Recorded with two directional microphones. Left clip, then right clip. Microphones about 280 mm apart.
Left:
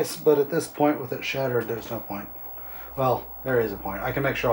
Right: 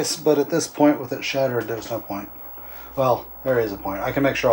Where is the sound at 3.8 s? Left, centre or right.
Right.